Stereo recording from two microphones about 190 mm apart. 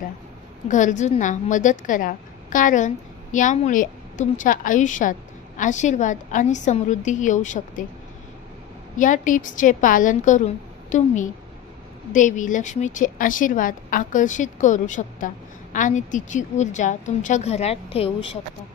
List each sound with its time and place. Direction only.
0.7 s a woman's voice: 40° left (ahead or behind)
8.9 s a woman's voice: 45° left (ahead or behind)